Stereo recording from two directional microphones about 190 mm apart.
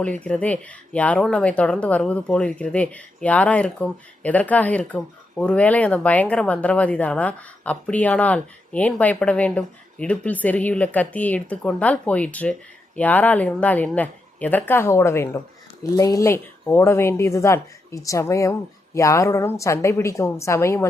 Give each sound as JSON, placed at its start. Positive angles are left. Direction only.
{"t": 0.0, "sound": "speech", "side_deg": 5}